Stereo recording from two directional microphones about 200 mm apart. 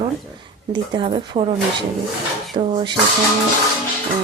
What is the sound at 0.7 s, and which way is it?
Speech, 25° right (ahead or behind).